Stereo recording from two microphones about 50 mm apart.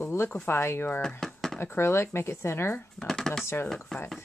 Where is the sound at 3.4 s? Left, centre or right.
Left.